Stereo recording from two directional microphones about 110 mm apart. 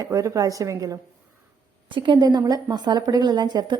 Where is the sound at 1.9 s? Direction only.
45° right (ahead or behind).